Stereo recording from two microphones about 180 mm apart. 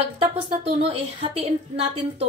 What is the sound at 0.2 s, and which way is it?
A woman's voice, 35° right (ahead or behind).